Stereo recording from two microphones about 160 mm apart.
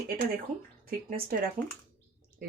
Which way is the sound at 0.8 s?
65° right (ahead or behind).